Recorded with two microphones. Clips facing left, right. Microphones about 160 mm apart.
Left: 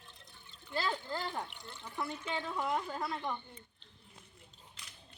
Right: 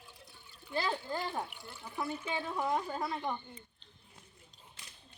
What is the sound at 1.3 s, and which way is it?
A woman's voice, 5° right (ahead or behind).